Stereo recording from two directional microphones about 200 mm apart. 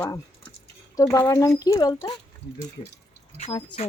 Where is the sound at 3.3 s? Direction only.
30° left (ahead or behind).